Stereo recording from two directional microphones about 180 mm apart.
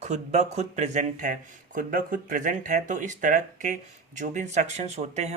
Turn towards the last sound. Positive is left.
turn(degrees=-35)  # may be behind; listen again after turning